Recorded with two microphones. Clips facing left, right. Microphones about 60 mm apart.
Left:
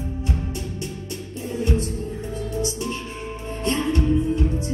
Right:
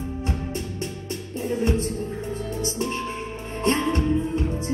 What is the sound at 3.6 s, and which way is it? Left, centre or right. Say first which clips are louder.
Music: even; right.